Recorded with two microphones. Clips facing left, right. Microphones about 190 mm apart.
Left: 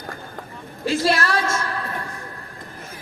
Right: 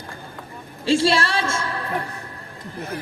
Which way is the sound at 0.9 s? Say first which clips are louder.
Right 2 dB; 30° right (ahead or behind).